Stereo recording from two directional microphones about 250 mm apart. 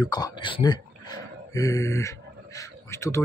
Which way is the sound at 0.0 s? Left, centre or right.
Centre.